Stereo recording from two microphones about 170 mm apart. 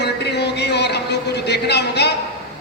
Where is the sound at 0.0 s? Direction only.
80° left.